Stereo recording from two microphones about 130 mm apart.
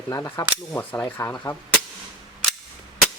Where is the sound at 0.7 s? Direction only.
15° left (ahead or behind).